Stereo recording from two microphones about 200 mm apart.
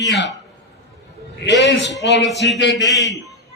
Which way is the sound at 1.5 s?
60° left (ahead or behind).